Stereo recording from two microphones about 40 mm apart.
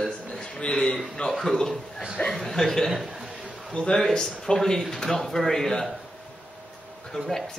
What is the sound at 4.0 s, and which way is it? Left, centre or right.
A man's voice, centre.